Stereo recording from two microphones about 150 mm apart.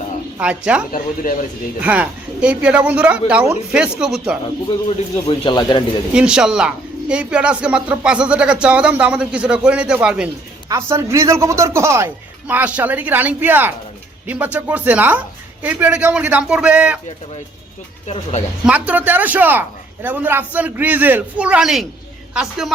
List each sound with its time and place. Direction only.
0.3 s a man's voice: 5° right (ahead or behind)
0.9 s speech: 65° left (ahead or behind)
1.8 s a man's voice: 10° right (ahead or behind)
4.9 s speech: 35° left (ahead or behind)
6.1 s a man's voice: 5° right (ahead or behind)
10.7 s a man's voice: 20° right (ahead or behind)
18.1 s speech: 50° left (ahead or behind)
18.6 s a man's voice: 10° right (ahead or behind)